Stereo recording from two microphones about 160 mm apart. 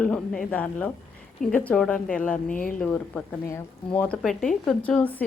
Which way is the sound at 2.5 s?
55° left (ahead or behind).